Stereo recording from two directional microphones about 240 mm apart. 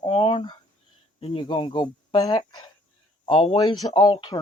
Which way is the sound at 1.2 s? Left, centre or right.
Left.